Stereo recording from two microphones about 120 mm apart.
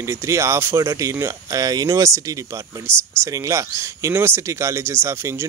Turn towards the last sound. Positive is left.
turn(degrees=-20)  # may be behind; listen again after turning